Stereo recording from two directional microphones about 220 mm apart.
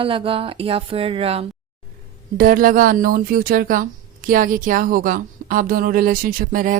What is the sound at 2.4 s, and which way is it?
Speech, 40° right (ahead or behind).